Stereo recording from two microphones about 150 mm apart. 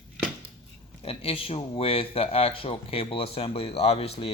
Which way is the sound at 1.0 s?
40° left (ahead or behind).